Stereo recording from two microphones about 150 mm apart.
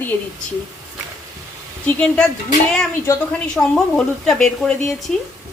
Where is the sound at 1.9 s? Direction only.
10° left (ahead or behind).